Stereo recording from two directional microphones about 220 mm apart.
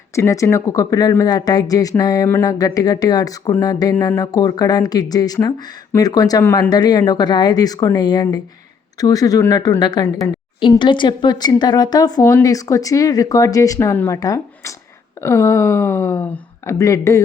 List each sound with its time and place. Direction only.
0.2 s speech: 15° left (ahead or behind)